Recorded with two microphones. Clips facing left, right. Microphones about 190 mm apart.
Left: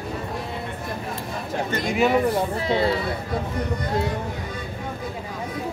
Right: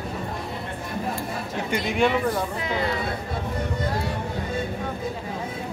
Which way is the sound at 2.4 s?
30° left (ahead or behind).